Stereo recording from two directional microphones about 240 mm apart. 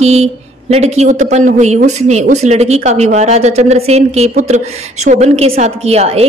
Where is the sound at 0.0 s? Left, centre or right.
Right.